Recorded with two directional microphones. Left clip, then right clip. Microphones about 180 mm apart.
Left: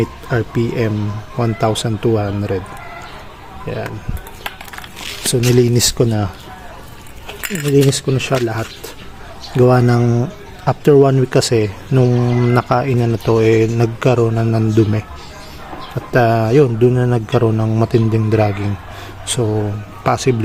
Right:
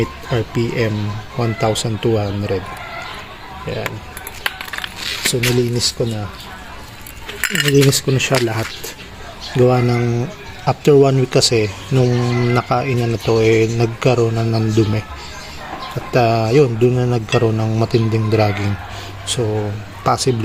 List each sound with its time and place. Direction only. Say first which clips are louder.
0.0 s speech: left 1 dB; 10° left (ahead or behind)
3.7 s speech: even; 5° left (ahead or behind)
5.2 s a sound: left 1 dB; 20° left (ahead or behind)
5.5 s speech: left 4 dB; 40° left (ahead or behind)
7.4 s speech: right 1 dB; centre (ahead or behind)
9.6 s speech: left 3 dB; 20° left (ahead or behind)
16.1 s speech: left 1 dB; 10° left (ahead or behind)
19.3 s speech: left 1 dB; 20° left (ahead or behind)